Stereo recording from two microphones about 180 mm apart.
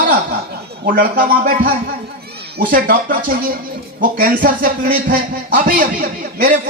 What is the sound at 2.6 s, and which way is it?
Speech, 50° right (ahead or behind).